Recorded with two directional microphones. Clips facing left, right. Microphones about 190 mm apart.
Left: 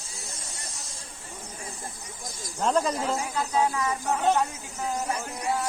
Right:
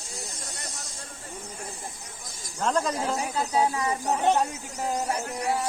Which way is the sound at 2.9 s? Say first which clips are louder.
Even; 25° right (ahead or behind).